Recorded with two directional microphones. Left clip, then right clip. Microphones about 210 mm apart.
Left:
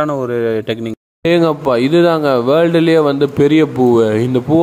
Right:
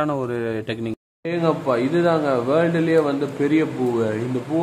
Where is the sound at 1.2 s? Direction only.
45° left (ahead or behind).